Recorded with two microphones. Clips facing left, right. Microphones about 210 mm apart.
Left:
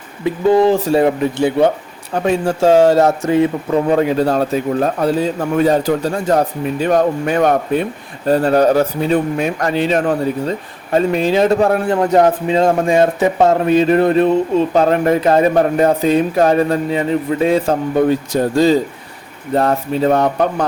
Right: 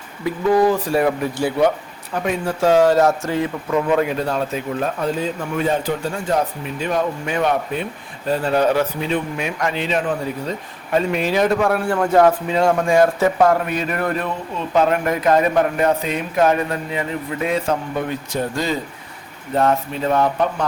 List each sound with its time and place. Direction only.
0.3 s a man's voice: 25° left (ahead or behind)